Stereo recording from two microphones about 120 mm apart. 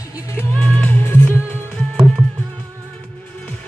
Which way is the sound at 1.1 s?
20° left (ahead or behind).